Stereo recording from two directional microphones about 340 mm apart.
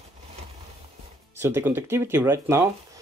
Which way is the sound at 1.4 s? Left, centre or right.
Centre.